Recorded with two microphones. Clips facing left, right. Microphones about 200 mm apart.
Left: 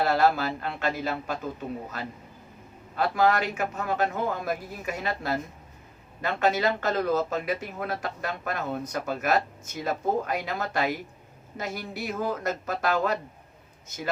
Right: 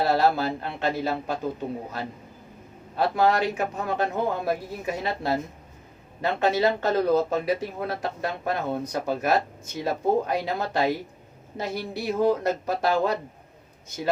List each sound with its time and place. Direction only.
0.0 s speech: 25° right (ahead or behind)
2.9 s speech: 25° right (ahead or behind)